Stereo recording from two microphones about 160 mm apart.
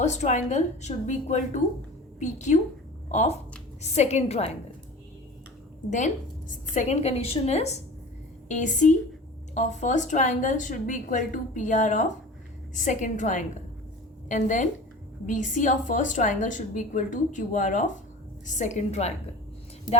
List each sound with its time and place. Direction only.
0.0 s a woman's voice: 45° left (ahead or behind)
6.7 s a woman's voice: 45° left (ahead or behind)